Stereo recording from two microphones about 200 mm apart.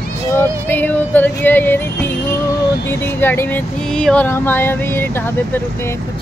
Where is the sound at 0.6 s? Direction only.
10° left (ahead or behind).